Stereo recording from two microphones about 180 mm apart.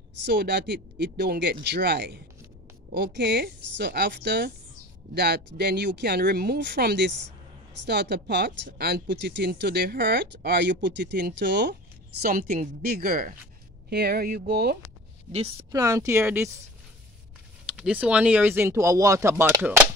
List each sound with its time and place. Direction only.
0.2 s speech: 70° right (ahead or behind)
12.2 s a woman's voice: 50° right (ahead or behind)
15.3 s a woman's voice: 35° right (ahead or behind)
15.7 s speech: 20° right (ahead or behind)
17.6 s speech: 5° right (ahead or behind)